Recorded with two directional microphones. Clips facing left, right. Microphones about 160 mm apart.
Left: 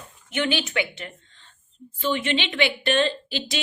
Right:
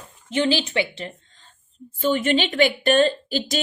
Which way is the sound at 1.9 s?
45° right (ahead or behind).